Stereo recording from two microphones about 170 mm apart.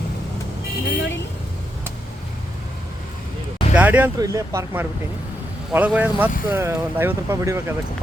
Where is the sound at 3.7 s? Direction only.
10° right (ahead or behind).